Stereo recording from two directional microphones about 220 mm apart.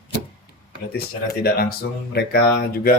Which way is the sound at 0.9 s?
45° left (ahead or behind).